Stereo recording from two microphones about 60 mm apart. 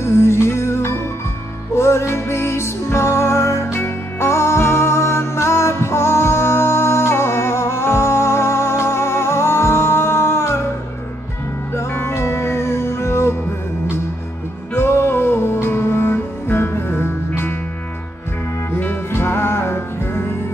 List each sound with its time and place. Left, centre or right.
0.0 s music: left
11.7 s music: left
14.7 s music: left
18.8 s music: left